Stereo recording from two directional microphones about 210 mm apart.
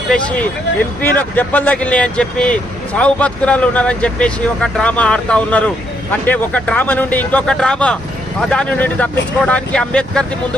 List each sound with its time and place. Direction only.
1.0 s speech: 10° left (ahead or behind)